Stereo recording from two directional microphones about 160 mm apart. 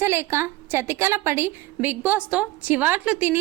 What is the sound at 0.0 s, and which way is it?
A woman's voice, 15° right (ahead or behind).